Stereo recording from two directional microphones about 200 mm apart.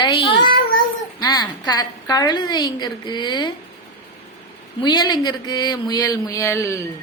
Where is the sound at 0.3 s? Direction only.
50° left (ahead or behind).